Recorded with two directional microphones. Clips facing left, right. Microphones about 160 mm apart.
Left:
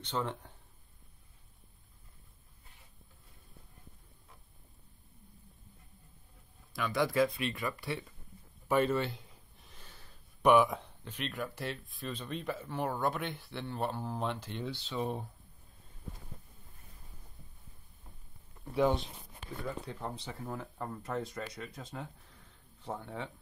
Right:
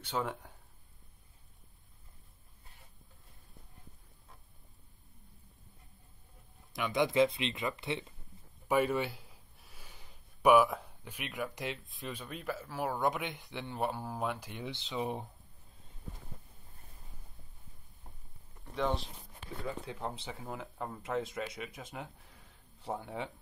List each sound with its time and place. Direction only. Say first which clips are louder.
0.0 s speech: even; 10° right (ahead or behind)
6.7 s a man's voice: right 1 dB; 20° right (ahead or behind)
18.8 s speech: left 5 dB; 5° left (ahead or behind)
19.6 s speech: right 1 dB; 10° right (ahead or behind)
21.8 s speech: left 1 dB; 15° right (ahead or behind)